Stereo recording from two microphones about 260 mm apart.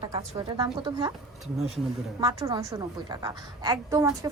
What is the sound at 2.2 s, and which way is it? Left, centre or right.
A woman's voice, centre.